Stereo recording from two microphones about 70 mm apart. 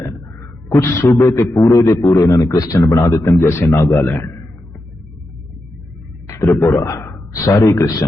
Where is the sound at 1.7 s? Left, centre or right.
Left.